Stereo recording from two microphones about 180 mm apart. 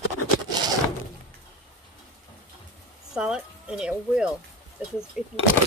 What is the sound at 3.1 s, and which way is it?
Speech, 5° right (ahead or behind).